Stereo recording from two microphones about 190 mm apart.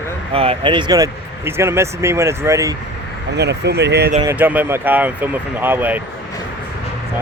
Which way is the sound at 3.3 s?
60° right (ahead or behind).